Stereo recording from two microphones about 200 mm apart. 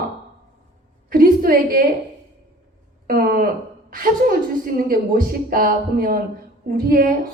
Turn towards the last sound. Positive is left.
turn(degrees=-45)  # may be behind; listen again after turning